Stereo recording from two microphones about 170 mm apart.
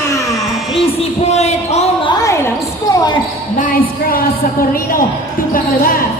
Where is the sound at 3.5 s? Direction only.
55° left (ahead or behind).